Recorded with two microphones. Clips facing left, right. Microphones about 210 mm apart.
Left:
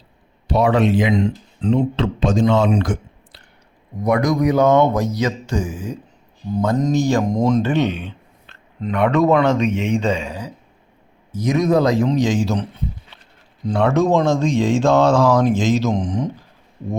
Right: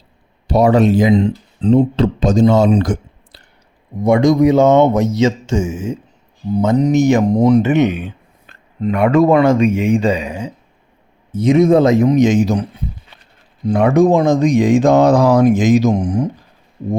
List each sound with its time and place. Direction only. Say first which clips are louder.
0.4 s speech: right 4 dB; 40° right (ahead or behind)
4.0 s speech: right 6 dB; 25° right (ahead or behind)
8.8 s speech: right 4 dB; 5° right (ahead or behind)
11.3 s speech: right 6 dB; 25° right (ahead or behind); by 16.4 s 10° right (ahead or behind)